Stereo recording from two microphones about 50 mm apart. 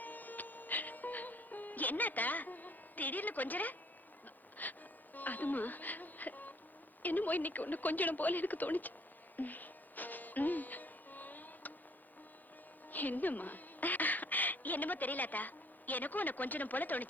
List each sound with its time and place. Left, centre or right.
0.0 s music: left
7.0 s speech: left
9.3 s music: left
12.9 s speech: left